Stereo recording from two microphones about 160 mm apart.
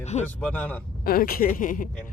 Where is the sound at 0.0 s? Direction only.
45° left (ahead or behind).